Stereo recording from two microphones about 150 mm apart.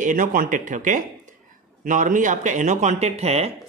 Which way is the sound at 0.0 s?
60° right (ahead or behind).